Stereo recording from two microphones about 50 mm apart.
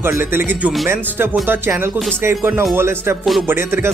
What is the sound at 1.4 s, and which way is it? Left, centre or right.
Speech, right.